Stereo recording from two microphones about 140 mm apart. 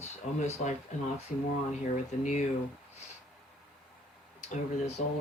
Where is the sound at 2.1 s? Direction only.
65° left (ahead or behind).